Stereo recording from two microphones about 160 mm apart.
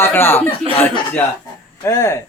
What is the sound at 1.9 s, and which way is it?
Speech, 20° left (ahead or behind).